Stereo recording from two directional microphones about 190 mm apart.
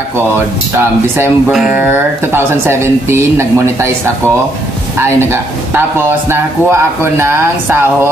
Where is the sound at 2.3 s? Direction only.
10° right (ahead or behind).